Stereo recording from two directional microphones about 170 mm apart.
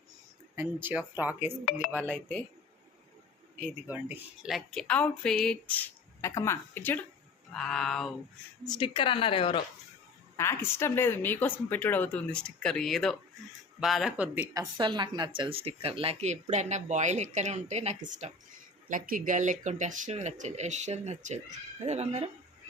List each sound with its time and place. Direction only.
0.5 s speech: 10° right (ahead or behind)
2.0 s speech: 10° left (ahead or behind)
3.8 s speech: 10° right (ahead or behind)
8.6 s a woman's voice: 25° left (ahead or behind)
10.3 s speech: 15° left (ahead or behind); by 14.4 s 5° right (ahead or behind)
14.5 s speech: 25° right (ahead or behind); by 22.3 s 40° right (ahead or behind)